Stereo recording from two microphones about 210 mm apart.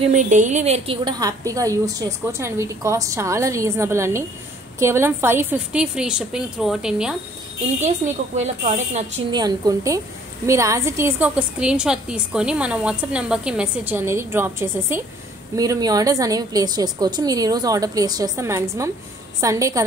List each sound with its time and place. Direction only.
0.1 s a woman's voice: 35° right (ahead or behind)
1.0 s a woman's voice: 15° right (ahead or behind)
8.4 s a woman's voice: 35° right (ahead or behind)
9.3 s a woman's voice: 20° right (ahead or behind)